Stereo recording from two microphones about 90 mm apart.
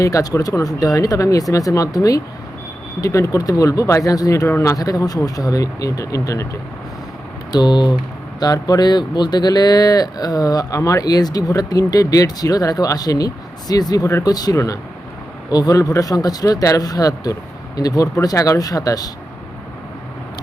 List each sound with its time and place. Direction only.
0.0 s speech: 40° left (ahead or behind)
7.5 s speech: 55° left (ahead or behind)